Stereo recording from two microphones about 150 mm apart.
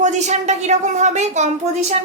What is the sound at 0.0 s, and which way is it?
A woman's voice, 50° right (ahead or behind).